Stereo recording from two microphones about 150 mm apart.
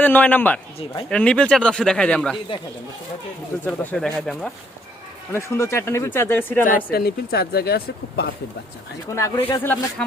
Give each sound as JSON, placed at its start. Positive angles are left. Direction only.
{"t": 0.0, "sound": "speech", "side_deg": 10}
{"t": 3.7, "sound": "speech", "side_deg": 5}
{"t": 5.3, "sound": "speech", "side_deg": 15}
{"t": 6.9, "sound": "speech", "side_deg": 90}
{"t": 9.1, "sound": "speech", "side_deg": 20}